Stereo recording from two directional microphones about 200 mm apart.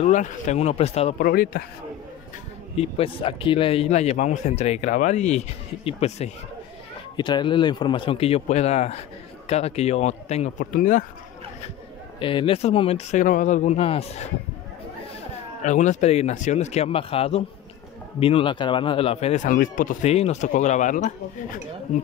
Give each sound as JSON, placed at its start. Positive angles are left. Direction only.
{"t": 0.0, "sound": "speech", "side_deg": 35}
{"t": 1.2, "sound": "speech", "side_deg": 45}
{"t": 2.8, "sound": "speech", "side_deg": 30}
{"t": 7.2, "sound": "speech", "side_deg": 25}
{"t": 12.2, "sound": "speech", "side_deg": 25}
{"t": 15.6, "sound": "speech", "side_deg": 35}